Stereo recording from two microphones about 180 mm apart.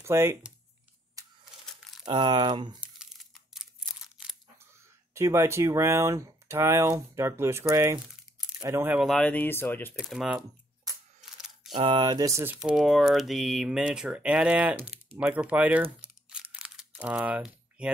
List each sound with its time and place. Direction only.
0.0 s speech: 15° right (ahead or behind)
1.2 s a sound: 20° right (ahead or behind)
2.0 s speech: 25° right (ahead or behind)
2.8 s crumpling: centre (ahead or behind)
5.1 s speech: 15° right (ahead or behind); by 9.9 s 10° left (ahead or behind)
9.9 s speech: centre (ahead or behind)
11.1 s mechanisms: centre (ahead or behind)
11.7 s speech: 25° right (ahead or behind)
12.5 s speech: 5° right (ahead or behind)
15.1 s a sound: 5° right (ahead or behind)